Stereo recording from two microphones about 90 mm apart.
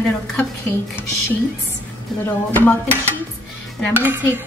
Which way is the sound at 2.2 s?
20° left (ahead or behind).